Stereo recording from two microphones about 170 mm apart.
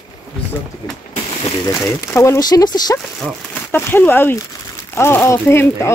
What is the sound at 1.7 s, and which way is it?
Speech, 15° left (ahead or behind).